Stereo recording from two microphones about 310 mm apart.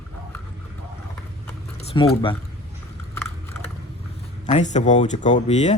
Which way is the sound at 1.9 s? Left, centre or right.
Centre.